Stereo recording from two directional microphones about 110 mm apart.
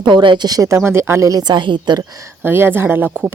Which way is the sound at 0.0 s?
45° right (ahead or behind).